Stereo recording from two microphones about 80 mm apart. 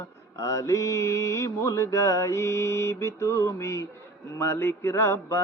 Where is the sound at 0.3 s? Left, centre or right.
Left.